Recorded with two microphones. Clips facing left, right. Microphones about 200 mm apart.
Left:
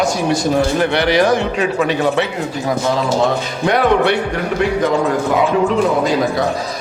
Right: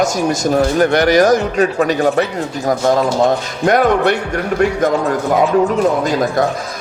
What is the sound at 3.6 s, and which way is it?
Speech, 45° right (ahead or behind).